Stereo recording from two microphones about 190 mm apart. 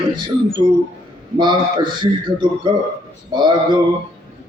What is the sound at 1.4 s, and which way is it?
A man's voice, 25° right (ahead or behind).